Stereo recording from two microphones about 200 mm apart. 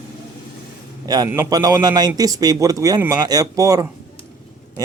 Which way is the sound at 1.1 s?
15° right (ahead or behind).